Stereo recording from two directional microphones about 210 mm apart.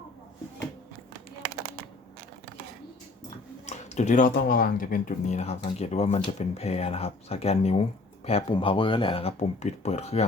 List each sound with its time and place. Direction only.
3.7 s speech: 35° left (ahead or behind)